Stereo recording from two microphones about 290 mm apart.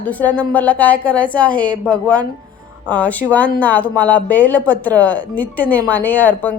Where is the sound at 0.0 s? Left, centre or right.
Centre.